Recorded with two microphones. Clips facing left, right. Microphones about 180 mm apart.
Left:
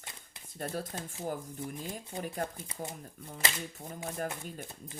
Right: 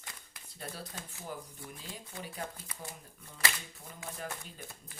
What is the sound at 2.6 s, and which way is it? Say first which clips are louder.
Speech: left 6 dB; 25° left (ahead or behind).